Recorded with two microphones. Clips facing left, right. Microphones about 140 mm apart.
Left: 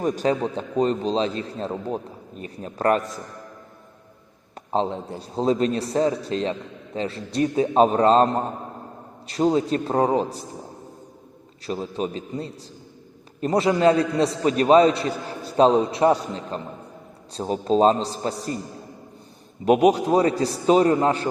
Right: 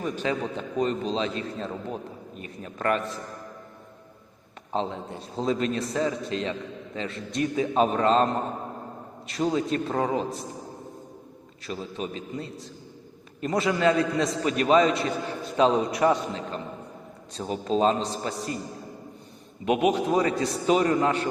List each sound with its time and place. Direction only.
0.0 s a man's voice: 40° left (ahead or behind)
4.7 s a man's voice: 35° left (ahead or behind)
11.6 s a man's voice: 35° left (ahead or behind)
19.6 s a man's voice: 40° left (ahead or behind)